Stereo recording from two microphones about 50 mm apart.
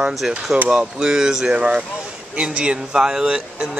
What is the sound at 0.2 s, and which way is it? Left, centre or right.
Speech, centre.